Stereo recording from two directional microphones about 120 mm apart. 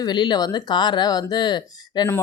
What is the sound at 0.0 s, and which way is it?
Speech, 40° left (ahead or behind).